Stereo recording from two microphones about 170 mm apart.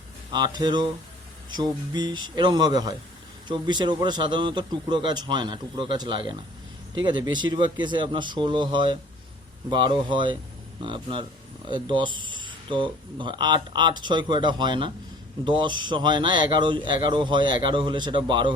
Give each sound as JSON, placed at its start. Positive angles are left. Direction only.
{"t": 0.3, "sound": "speech", "side_deg": -25}